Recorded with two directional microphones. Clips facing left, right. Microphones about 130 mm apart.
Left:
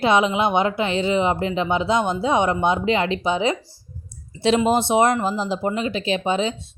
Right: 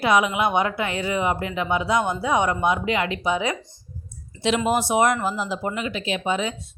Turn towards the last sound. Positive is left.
turn(degrees=30)  # may be behind; listen again after turning